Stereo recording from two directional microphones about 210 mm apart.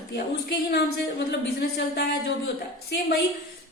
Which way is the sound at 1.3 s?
50° left (ahead or behind).